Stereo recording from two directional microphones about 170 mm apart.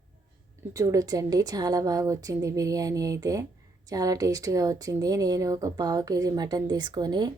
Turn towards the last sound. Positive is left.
turn(degrees=-25)  # may be behind; listen again after turning